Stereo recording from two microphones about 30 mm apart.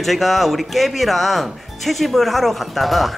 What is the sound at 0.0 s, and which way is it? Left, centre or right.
Speech, centre.